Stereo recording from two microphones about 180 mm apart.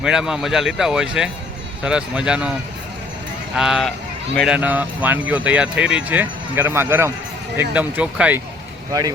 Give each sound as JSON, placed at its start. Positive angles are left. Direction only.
{"t": 0.0, "sound": "speech", "side_deg": -5}
{"t": 3.5, "sound": "speech", "side_deg": -5}
{"t": 8.9, "sound": "speech", "side_deg": -20}